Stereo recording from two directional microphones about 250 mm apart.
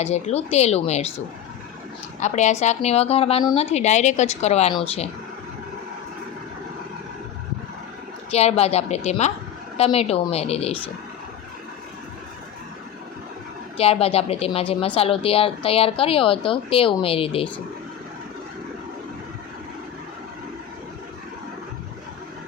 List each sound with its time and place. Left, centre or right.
0.0 s speech: left
2.2 s speech: left
8.3 s speech: left
13.7 s speech: left